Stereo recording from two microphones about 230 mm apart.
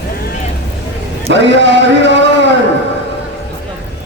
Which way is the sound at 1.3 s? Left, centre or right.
Right.